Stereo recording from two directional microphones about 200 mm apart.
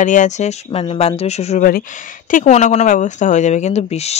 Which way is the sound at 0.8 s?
25° left (ahead or behind).